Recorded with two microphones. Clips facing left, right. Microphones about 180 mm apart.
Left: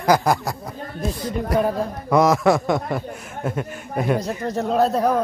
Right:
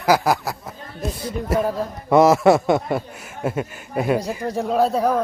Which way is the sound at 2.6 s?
5° right (ahead or behind).